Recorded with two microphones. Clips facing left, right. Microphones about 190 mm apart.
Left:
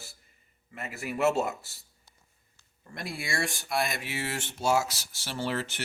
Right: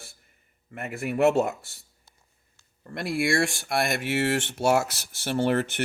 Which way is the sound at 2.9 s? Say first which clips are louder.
Right 11 dB; 80° right.